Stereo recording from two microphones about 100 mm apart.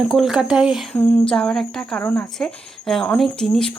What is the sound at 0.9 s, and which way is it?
Speech, 10° left (ahead or behind).